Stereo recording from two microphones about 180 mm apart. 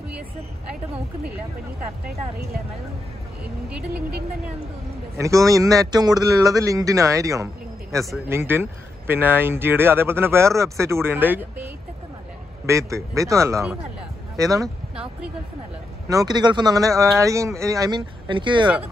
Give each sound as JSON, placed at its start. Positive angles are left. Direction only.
{"t": 5.1, "sound": "speech", "side_deg": -15}
{"t": 16.1, "sound": "speech", "side_deg": -20}